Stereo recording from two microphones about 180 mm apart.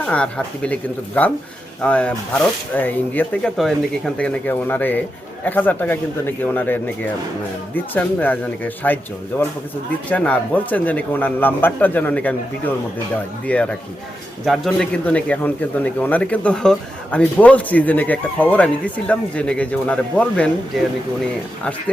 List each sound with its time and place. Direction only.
0.0 s speech: 5° left (ahead or behind)